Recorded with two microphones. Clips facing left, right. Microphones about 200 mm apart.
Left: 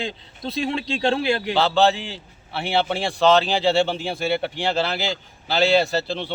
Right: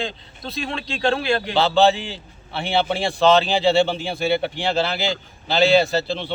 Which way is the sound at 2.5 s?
5° left (ahead or behind).